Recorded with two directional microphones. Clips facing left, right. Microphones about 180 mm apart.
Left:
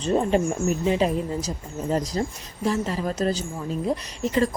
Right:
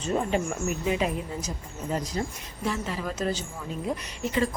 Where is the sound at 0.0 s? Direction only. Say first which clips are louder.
Left 5 dB; 35° left (ahead or behind).